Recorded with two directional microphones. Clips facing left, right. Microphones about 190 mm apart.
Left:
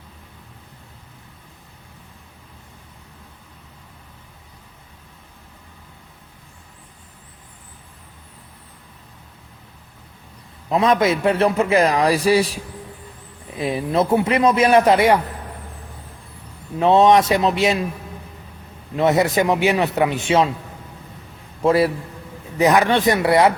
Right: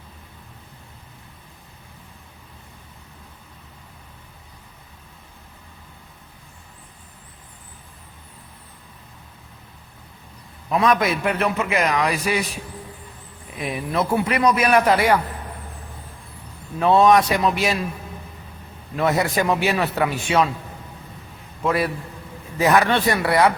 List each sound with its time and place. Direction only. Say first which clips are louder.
10.7 s a man's voice: left 2 dB; 25° left (ahead or behind)
13.6 s a man's voice: left 4 dB; 30° left (ahead or behind)
16.8 s a man's voice: left 2 dB; 25° left (ahead or behind)
18.9 s a man's voice: left 4 dB; 20° left (ahead or behind)
21.6 s a man's voice: left 6 dB; 30° left (ahead or behind)
22.5 s a man's voice: left 2 dB; 15° left (ahead or behind)